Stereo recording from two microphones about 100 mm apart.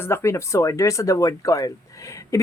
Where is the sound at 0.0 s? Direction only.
25° left (ahead or behind).